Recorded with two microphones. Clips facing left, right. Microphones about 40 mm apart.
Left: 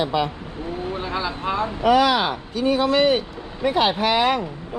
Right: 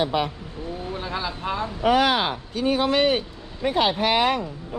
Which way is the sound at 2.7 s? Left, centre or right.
Right.